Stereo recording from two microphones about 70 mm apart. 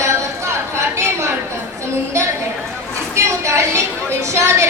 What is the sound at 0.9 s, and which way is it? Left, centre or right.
Chatter, right.